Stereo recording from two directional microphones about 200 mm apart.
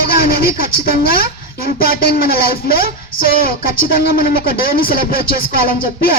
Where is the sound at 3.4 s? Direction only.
50° left (ahead or behind).